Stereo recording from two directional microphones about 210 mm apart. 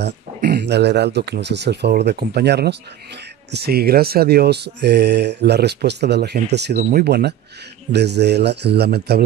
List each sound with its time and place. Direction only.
0.0 s speech: 50° right (ahead or behind)